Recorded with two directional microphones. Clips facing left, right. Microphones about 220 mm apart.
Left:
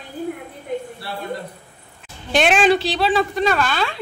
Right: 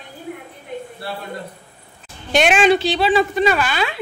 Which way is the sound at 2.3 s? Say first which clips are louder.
Right 1 dB; centre (ahead or behind).